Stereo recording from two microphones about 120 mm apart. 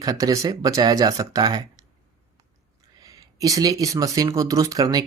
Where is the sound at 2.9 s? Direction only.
30° right (ahead or behind).